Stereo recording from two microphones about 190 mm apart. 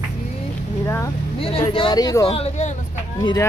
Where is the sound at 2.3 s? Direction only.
30° left (ahead or behind).